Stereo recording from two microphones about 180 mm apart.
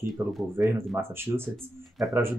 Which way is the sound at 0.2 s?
15° right (ahead or behind).